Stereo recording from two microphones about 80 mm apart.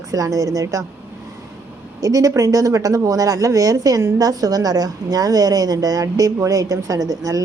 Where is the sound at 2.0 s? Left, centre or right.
Right.